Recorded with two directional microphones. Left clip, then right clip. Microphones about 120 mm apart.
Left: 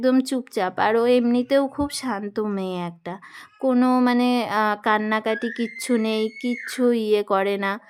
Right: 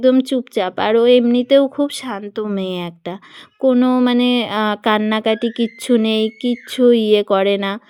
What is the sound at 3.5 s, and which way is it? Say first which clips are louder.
Speech: right 5 dB; 15° right (ahead or behind).